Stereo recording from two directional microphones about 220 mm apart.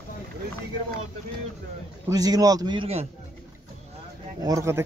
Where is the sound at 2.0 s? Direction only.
15° right (ahead or behind).